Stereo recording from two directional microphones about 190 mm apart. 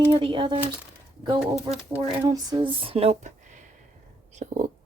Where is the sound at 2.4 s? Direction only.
25° right (ahead or behind).